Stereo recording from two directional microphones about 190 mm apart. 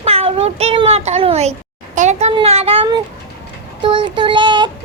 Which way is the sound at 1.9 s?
40° right (ahead or behind).